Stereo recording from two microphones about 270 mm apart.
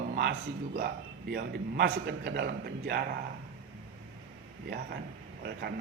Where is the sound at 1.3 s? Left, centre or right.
Right.